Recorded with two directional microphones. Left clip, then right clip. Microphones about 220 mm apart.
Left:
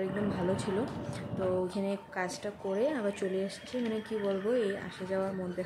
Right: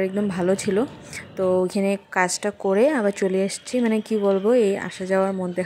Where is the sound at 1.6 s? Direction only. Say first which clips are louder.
Right 11 dB; 45° right (ahead or behind).